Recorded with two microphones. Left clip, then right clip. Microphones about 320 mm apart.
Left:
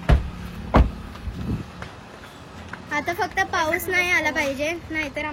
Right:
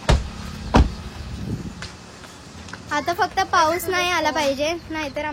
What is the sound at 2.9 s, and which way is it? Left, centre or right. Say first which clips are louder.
A woman's voice: right 3 dB; centre.